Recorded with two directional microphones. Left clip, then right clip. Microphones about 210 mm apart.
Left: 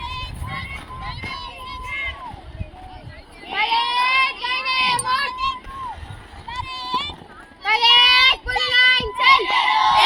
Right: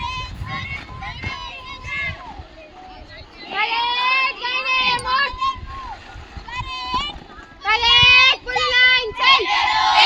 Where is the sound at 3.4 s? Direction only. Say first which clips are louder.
Left 1 dB; 40° left (ahead or behind).